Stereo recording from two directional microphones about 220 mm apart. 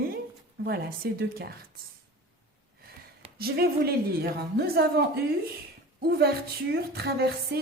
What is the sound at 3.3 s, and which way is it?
A woman's voice, 45° right (ahead or behind).